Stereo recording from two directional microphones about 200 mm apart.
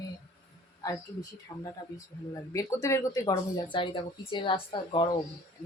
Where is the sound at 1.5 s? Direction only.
20° left (ahead or behind).